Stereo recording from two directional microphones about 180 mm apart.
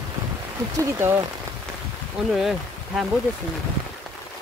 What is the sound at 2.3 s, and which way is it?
Speech, centre (ahead or behind).